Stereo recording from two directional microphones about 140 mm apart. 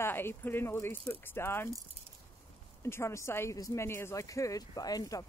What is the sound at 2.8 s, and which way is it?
A woman's voice, 20° left (ahead or behind).